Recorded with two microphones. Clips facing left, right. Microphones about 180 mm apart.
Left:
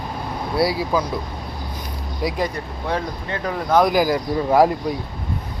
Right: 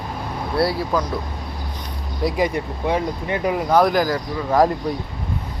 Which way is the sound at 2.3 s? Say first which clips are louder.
Right 3 dB; 10° right (ahead or behind).